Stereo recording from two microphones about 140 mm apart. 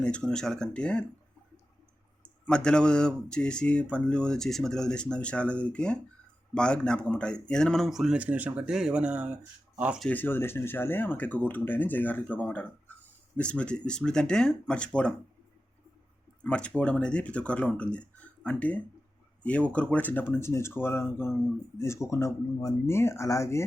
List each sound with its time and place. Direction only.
0.0 s speech: 5° left (ahead or behind)
2.5 s speech: 5° left (ahead or behind); by 10.0 s 10° right (ahead or behind)
10.0 s speech: 10° left (ahead or behind)
16.4 s speech: 10° left (ahead or behind)